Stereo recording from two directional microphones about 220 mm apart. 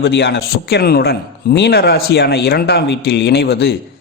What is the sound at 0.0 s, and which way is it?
Speech, 50° left (ahead or behind).